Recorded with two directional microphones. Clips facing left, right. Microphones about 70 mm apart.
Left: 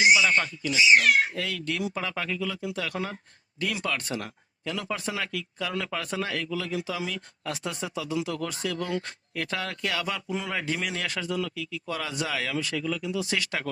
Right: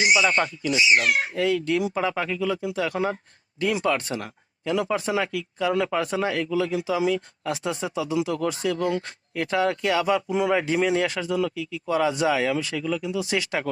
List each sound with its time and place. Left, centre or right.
0.1 s speech: right